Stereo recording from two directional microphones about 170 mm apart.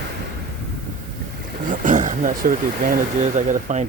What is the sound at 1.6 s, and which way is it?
Speech, 50° right (ahead or behind).